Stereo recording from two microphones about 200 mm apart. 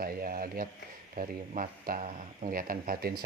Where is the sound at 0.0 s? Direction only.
45° right (ahead or behind).